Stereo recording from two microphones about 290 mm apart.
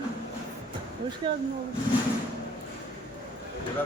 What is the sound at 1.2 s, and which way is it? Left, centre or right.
Speech, centre.